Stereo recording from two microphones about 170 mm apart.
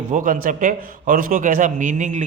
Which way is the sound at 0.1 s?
50° right (ahead or behind).